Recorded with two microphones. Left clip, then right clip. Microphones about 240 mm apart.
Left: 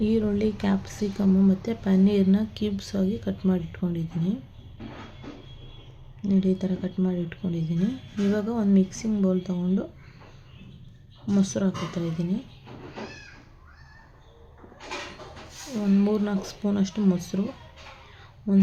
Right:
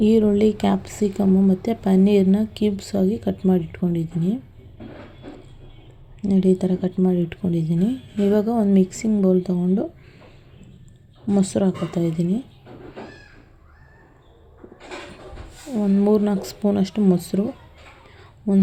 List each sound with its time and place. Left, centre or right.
0.0 s speech: right
6.2 s speech: centre
11.3 s speech: centre
16.0 s speech: centre
18.2 s a sound: centre